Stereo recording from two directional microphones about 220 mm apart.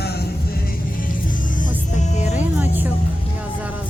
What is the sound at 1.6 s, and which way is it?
Music, 30° left (ahead or behind).